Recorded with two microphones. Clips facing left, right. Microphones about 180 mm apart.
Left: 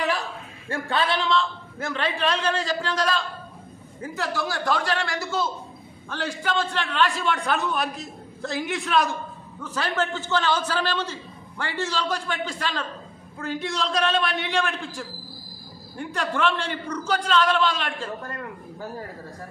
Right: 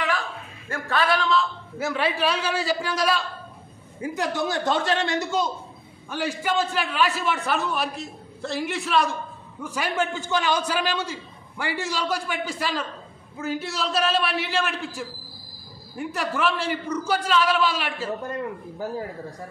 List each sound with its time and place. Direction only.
0.7 s a man's voice: 30° left (ahead or behind)
1.3 s a man's voice: 5° right (ahead or behind)
16.0 s a man's voice: 5° right (ahead or behind)
18.2 s a man's voice: 20° right (ahead or behind)